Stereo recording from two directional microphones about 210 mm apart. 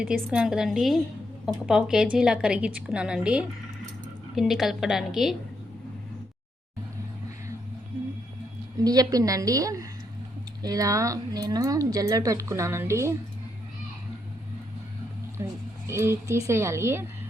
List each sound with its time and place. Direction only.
0.0 s a woman's voice: 5° right (ahead or behind)
8.8 s speech: 15° right (ahead or behind)
15.4 s speech: 10° right (ahead or behind)